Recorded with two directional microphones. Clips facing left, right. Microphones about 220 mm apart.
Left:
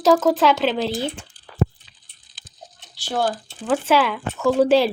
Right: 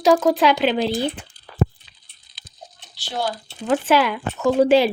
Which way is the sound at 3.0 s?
50° left (ahead or behind).